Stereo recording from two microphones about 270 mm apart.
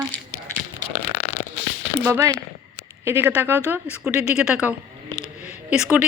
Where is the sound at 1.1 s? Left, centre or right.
Left.